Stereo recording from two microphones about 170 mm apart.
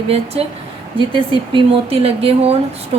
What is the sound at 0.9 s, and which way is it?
Speech, 30° right (ahead or behind).